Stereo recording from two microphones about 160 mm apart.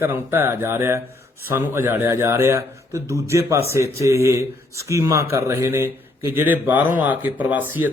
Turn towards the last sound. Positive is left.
turn(degrees=-10)  # may be behind; listen again after turning